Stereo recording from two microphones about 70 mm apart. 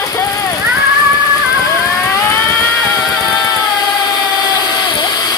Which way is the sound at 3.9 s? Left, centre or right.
Left.